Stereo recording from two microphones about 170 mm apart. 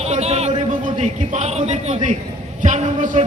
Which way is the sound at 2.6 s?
45° right (ahead or behind).